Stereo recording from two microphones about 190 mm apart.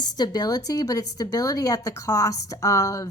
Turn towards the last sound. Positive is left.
turn(degrees=15)  # may be behind; listen again after turning